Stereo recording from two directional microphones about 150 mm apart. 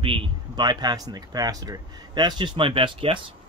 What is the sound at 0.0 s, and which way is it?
Speech, 30° right (ahead or behind).